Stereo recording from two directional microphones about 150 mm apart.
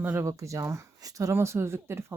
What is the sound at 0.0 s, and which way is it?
Speech, 15° right (ahead or behind).